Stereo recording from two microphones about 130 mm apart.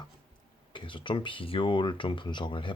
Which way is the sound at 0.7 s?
40° left (ahead or behind).